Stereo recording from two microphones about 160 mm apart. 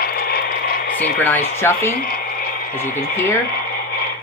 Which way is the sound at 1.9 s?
70° left (ahead or behind).